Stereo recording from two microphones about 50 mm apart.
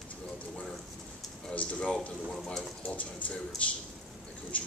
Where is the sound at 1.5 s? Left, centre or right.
Left.